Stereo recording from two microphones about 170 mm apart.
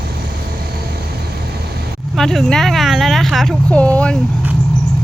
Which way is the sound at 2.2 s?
Centre (ahead or behind).